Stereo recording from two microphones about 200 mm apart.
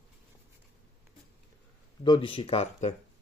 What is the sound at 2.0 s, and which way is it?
Speech, 25° left (ahead or behind).